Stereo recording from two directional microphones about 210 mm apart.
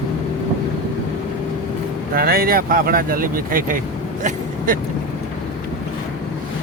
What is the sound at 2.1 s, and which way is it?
Speech, 45° right (ahead or behind).